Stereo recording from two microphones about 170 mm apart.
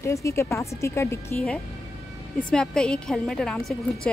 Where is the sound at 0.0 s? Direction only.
15° left (ahead or behind).